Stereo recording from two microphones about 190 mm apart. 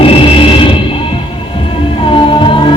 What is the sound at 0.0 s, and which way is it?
Music, 30° left (ahead or behind).